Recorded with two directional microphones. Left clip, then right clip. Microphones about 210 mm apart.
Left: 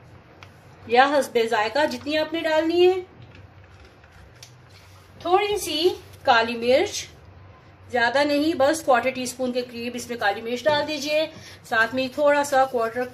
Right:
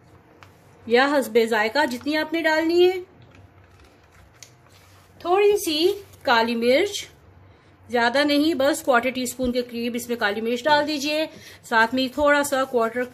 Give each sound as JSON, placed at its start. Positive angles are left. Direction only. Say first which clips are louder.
{"t": 0.8, "sound": "a woman's voice", "louder": "left 1 dB", "side_deg": -30}
{"t": 5.3, "sound": "a woman's voice", "louder": "right 3 dB", "side_deg": -45}